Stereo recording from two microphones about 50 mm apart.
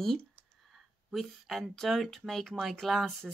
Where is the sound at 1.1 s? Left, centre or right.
Centre.